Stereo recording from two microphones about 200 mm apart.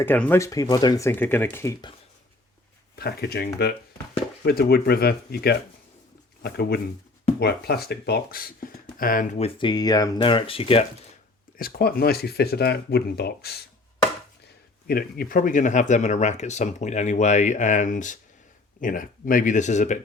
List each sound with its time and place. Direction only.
0.0 s speech: 10° left (ahead or behind)
2.9 s speech: 50° left (ahead or behind)
9.6 s speech: 20° left (ahead or behind)
11.5 s speech: 50° left (ahead or behind)
14.8 s speech: 50° left (ahead or behind)